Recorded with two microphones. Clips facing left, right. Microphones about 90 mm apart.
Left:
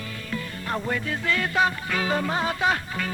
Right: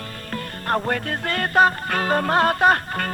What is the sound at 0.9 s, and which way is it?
Music, 55° right (ahead or behind).